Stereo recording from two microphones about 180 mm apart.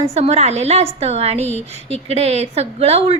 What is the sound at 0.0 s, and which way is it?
A woman's voice, 35° right (ahead or behind).